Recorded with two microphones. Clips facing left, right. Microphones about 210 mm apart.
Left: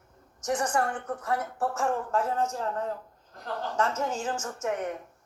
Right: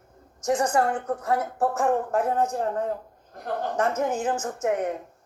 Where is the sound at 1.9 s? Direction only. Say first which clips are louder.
Right 4 dB; 55° right (ahead or behind).